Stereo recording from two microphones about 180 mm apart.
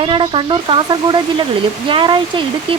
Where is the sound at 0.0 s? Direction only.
30° right (ahead or behind).